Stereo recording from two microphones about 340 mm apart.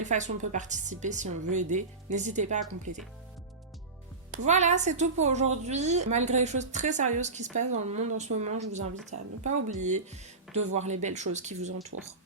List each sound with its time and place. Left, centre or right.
0.0 s a woman's voice: right
4.3 s a woman's voice: centre
11.9 s speech: right